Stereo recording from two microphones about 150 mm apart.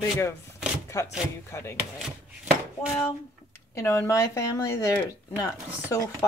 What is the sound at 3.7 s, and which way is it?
Speech, 20° left (ahead or behind).